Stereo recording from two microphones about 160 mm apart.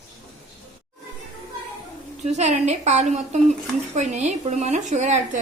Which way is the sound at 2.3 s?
45° right (ahead or behind).